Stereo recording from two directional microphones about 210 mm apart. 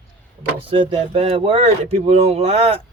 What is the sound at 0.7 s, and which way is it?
Speech, 25° right (ahead or behind).